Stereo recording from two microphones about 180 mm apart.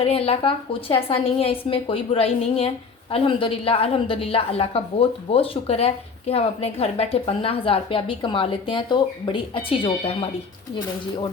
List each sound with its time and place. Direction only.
0.0 s a woman's voice: 35° left (ahead or behind)